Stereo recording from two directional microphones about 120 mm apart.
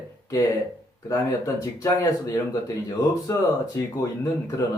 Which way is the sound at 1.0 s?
30° left (ahead or behind).